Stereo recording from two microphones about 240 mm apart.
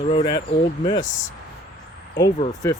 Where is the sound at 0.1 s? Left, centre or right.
Left.